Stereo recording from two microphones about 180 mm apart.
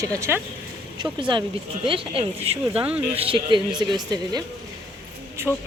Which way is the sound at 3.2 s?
30° right (ahead or behind).